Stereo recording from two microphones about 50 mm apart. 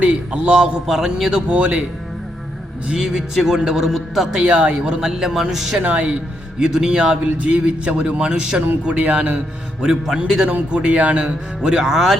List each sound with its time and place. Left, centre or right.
0.0 s a man's voice: right
0.5 s a man's voice: centre
1.5 s a man's voice: right
2.8 s a man's voice: centre
4.4 s a man's voice: right; by 5.8 s centre
5.8 s a man's voice: right
6.6 s a man's voice: centre
7.4 s a man's voice: right
9.8 s a man's voice: centre
10.7 s a man's voice: right
11.9 s speech: centre